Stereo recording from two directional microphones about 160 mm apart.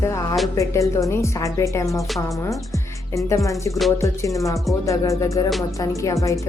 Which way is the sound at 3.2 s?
20° left (ahead or behind).